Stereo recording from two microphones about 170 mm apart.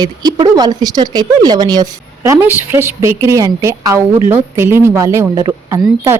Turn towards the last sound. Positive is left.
turn(degrees=-15)  # may be behind; listen again after turning